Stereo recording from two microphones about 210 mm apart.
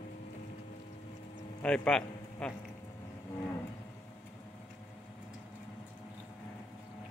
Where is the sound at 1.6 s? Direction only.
5° left (ahead or behind).